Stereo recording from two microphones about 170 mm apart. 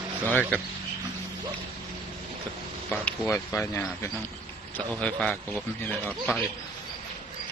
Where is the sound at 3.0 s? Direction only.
15° left (ahead or behind).